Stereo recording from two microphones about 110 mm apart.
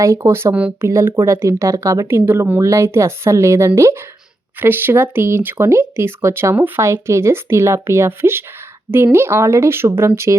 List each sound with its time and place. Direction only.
0.0 s speech: 25° right (ahead or behind)
0.5 s speech: 10° right (ahead or behind)
0.9 s speech: 25° right (ahead or behind)